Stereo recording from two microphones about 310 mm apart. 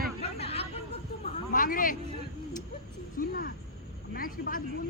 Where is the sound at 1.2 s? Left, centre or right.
Left.